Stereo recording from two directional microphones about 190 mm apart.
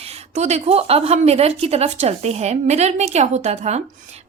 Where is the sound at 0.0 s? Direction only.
35° right (ahead or behind).